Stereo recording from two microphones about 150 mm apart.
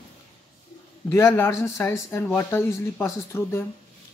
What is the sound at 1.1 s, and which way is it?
Speech, 15° left (ahead or behind).